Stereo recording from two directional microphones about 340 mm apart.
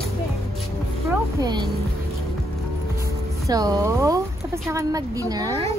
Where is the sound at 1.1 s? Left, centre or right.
Centre.